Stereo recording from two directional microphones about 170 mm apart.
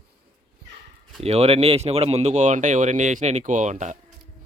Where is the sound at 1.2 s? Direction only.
35° right (ahead or behind).